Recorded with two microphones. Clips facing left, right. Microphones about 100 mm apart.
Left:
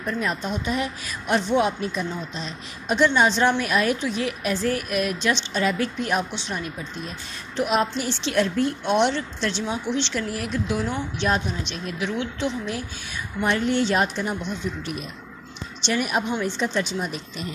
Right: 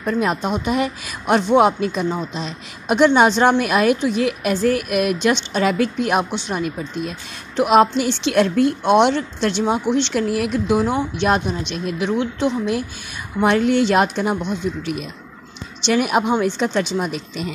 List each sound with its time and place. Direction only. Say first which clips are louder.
0.0 s a woman's voice: right 6 dB; 65° right (ahead or behind)
13.4 s speech: right 6 dB; 70° right (ahead or behind)
15.8 s speech: right 7 dB; 80° right